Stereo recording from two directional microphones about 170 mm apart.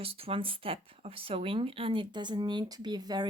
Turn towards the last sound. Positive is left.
turn(degrees=-25)  # may be behind; listen again after turning